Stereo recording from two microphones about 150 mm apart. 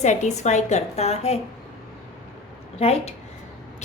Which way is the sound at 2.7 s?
45° left (ahead or behind).